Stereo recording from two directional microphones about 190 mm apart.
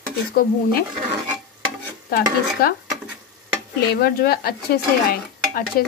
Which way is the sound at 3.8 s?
55° left (ahead or behind).